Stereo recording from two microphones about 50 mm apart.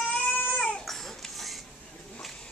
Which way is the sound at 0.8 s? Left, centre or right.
Centre.